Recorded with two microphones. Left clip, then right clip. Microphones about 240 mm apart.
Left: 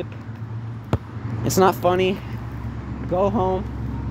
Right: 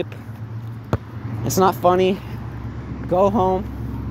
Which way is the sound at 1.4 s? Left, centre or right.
Centre.